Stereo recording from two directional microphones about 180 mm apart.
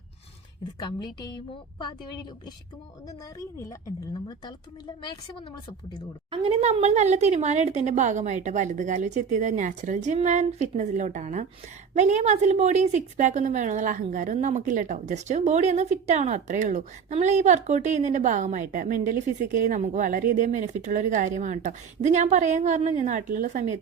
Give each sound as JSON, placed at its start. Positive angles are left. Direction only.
{"t": 0.8, "sound": "a woman's voice", "side_deg": 25}
{"t": 6.3, "sound": "a woman's voice", "side_deg": -30}